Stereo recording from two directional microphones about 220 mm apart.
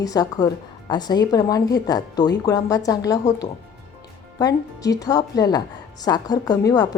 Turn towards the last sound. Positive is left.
turn(degrees=15)  # may be behind; listen again after turning